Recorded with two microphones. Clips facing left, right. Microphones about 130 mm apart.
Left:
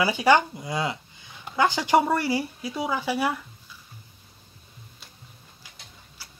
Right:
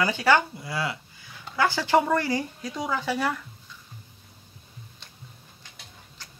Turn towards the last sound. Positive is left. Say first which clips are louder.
# even
turn(degrees=10)  # may be behind; listen again after turning